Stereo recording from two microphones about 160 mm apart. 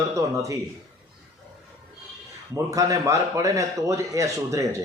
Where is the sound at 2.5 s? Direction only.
20° right (ahead or behind).